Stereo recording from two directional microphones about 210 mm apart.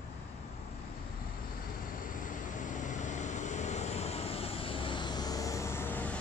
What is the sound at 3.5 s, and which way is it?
Vehicle, 35° left (ahead or behind).